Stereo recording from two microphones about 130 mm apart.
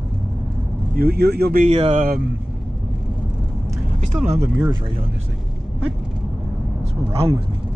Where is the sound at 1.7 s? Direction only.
50° right (ahead or behind).